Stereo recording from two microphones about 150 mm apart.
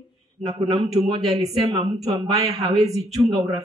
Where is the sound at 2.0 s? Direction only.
20° right (ahead or behind).